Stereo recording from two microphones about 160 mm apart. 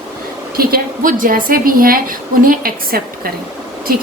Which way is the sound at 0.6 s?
65° right (ahead or behind).